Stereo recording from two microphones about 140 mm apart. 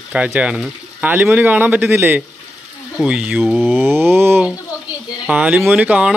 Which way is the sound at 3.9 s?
15° right (ahead or behind).